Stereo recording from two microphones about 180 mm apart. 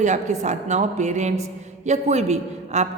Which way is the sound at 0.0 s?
40° right (ahead or behind).